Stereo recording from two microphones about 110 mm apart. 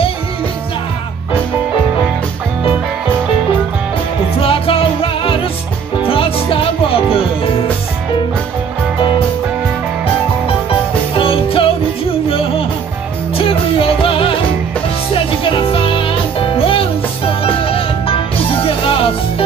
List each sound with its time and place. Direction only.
4.4 s music: 60° left (ahead or behind)
11.1 s music: 60° left (ahead or behind)
13.4 s music: 60° left (ahead or behind)
15.4 s music: 55° left (ahead or behind)